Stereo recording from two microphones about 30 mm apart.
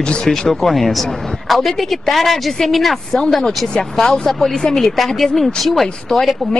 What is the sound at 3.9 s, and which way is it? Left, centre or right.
Speech, centre.